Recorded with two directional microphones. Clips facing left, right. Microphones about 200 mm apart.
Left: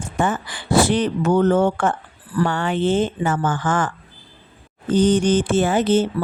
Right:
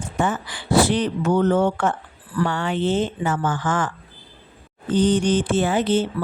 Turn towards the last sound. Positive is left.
turn(degrees=45)  # may be behind; listen again after turning